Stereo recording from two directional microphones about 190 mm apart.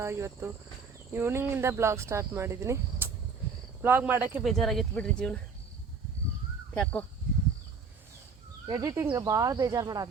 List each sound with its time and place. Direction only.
0.0 s speech: 15° right (ahead or behind)
4.4 s speech: centre (ahead or behind)
8.6 s speech: 20° right (ahead or behind)